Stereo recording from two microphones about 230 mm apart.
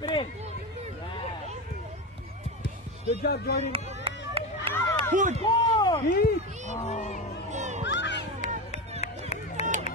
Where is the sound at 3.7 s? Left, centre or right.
Right.